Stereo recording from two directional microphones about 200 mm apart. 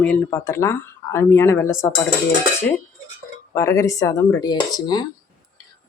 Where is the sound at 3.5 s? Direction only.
15° left (ahead or behind).